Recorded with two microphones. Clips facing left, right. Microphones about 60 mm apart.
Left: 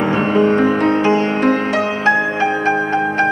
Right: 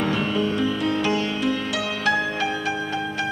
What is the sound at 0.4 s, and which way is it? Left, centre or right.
Music, left.